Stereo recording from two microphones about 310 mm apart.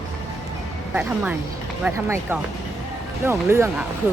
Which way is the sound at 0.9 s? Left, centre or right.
Centre.